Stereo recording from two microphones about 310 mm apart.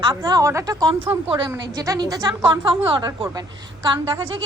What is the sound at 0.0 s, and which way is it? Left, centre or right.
A woman's voice, centre.